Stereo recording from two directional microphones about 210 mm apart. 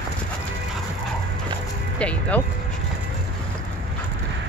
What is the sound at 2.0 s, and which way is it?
Speech, 5° left (ahead or behind).